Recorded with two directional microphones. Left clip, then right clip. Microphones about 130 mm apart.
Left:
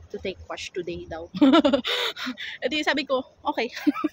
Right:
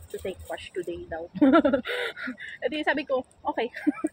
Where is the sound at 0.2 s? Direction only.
35° left (ahead or behind).